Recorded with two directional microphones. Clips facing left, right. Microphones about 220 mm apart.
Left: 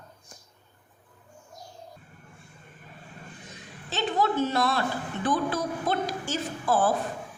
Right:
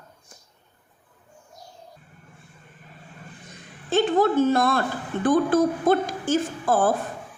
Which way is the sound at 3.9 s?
50° right (ahead or behind).